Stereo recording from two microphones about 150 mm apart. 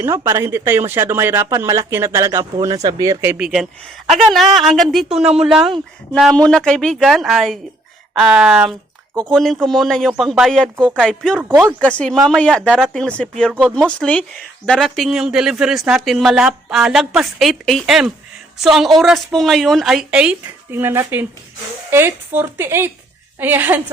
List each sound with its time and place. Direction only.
0.0 s speech: 15° right (ahead or behind)
3.2 s speech: 10° right (ahead or behind)